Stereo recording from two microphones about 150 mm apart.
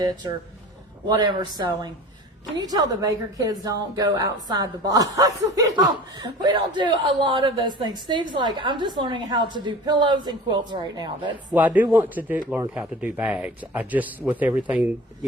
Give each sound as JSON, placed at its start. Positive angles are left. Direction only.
{"t": 1.0, "sound": "a woman's voice", "side_deg": -25}
{"t": 11.5, "sound": "speech", "side_deg": -10}